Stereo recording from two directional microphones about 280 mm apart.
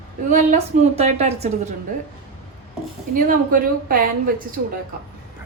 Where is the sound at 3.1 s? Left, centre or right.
Right.